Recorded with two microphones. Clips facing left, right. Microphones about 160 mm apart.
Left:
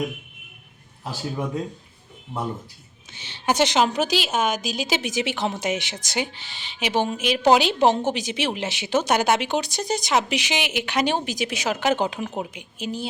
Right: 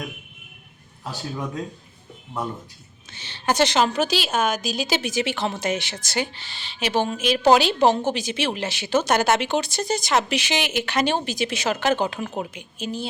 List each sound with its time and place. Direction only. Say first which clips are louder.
3.1 s a woman's voice: even; 15° left (ahead or behind)